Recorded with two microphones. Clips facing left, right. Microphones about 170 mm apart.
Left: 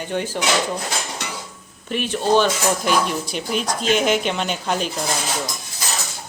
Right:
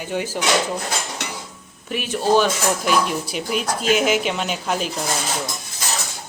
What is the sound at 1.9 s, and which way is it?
Speech, 5° right (ahead or behind).